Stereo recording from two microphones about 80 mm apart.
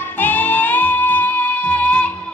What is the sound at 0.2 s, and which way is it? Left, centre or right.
Music, left.